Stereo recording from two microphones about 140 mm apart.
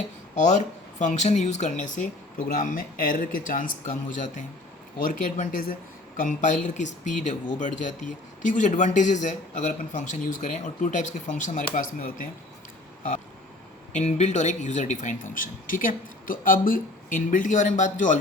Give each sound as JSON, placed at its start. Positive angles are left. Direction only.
{"t": 0.3, "sound": "speech", "side_deg": 60}
{"t": 2.6, "sound": "speech", "side_deg": 75}
{"t": 13.9, "sound": "speech", "side_deg": 55}